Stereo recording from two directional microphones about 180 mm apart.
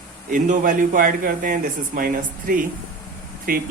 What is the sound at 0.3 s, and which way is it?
Speech, 50° right (ahead or behind).